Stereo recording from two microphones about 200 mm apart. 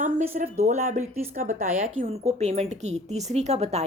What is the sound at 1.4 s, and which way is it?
Speech, 45° right (ahead or behind).